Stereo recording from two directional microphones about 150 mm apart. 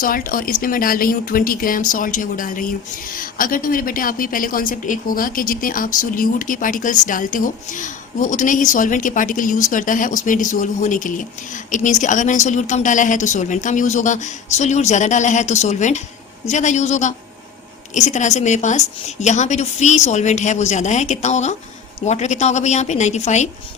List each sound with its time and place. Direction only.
0.0 s a woman's voice: 70° left (ahead or behind); by 23.5 s 50° left (ahead or behind)